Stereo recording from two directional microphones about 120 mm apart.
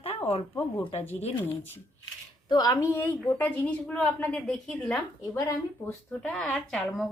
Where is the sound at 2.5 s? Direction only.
35° left (ahead or behind); by 5.4 s 10° left (ahead or behind).